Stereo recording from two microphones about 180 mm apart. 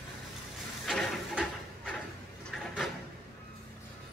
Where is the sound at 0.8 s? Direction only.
Centre (ahead or behind).